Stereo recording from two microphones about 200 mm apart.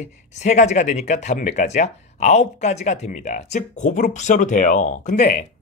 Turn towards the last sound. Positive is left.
turn(degrees=40)  # may be behind; listen again after turning